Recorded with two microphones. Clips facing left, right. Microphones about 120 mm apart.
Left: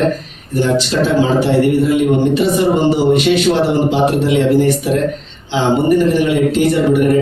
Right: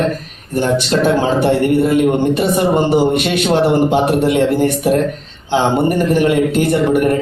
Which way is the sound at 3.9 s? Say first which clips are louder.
Even; 55° right (ahead or behind).